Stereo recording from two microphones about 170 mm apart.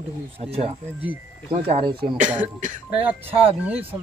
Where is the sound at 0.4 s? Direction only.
35° right (ahead or behind).